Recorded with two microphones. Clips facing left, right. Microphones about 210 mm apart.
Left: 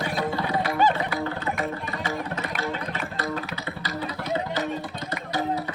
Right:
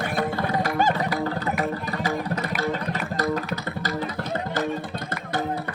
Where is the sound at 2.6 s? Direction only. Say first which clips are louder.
Right 3 dB; 40° right (ahead or behind).